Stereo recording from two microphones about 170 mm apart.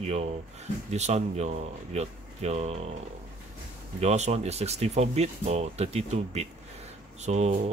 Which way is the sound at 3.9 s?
40° right (ahead or behind).